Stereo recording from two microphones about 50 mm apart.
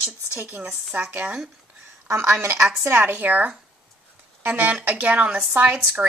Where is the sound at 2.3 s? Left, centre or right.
Right.